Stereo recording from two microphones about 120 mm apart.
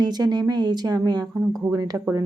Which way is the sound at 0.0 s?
35° right (ahead or behind).